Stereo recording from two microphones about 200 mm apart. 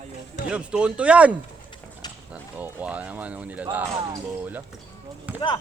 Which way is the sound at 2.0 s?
20° left (ahead or behind).